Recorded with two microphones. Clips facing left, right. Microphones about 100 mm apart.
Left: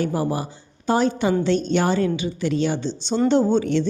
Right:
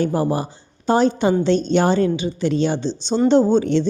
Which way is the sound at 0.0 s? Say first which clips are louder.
Right 3 dB; 35° right (ahead or behind).